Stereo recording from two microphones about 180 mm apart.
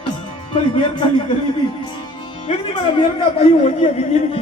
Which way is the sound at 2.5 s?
30° left (ahead or behind).